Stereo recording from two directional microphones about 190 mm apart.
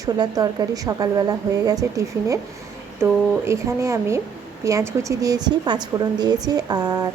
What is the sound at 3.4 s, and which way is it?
A woman's voice, 15° right (ahead or behind).